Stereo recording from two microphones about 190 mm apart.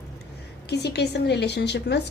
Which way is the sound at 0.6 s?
60° left (ahead or behind).